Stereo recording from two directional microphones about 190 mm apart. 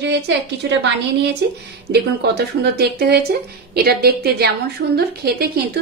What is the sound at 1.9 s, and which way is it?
A woman's voice, 60° right (ahead or behind).